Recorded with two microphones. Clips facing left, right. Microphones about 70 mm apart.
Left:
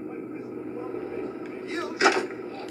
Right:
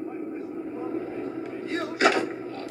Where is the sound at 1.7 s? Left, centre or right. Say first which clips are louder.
Even; right.